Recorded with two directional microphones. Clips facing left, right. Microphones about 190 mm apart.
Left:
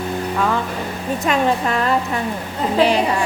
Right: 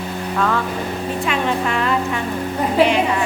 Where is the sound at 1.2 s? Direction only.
40° left (ahead or behind).